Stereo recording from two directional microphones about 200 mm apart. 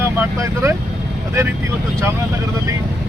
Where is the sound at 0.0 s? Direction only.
10° right (ahead or behind).